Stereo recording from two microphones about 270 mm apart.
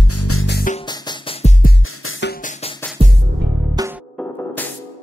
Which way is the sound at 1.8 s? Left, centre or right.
Left.